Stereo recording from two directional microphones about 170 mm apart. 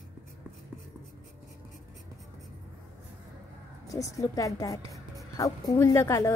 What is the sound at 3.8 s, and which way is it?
A woman's voice, 20° left (ahead or behind).